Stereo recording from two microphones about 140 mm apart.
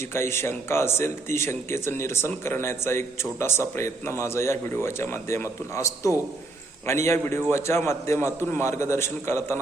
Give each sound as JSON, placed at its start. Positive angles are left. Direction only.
{"t": 0.1, "sound": "speech", "side_deg": 20}